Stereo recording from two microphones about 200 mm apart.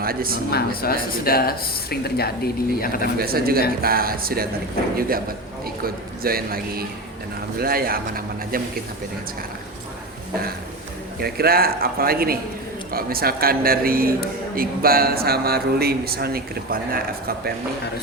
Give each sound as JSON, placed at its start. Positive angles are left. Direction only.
{"t": 0.0, "sound": "speech", "side_deg": -50}
{"t": 0.5, "sound": "speech", "side_deg": 50}
{"t": 3.2, "sound": "a man's voice", "side_deg": -50}
{"t": 11.2, "sound": "speech", "side_deg": -50}